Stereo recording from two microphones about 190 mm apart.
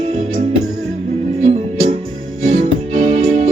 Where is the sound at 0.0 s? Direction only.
35° right (ahead or behind).